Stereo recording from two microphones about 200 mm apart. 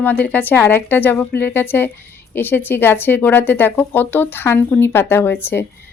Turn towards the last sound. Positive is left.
turn(degrees=10)  # may be behind; listen again after turning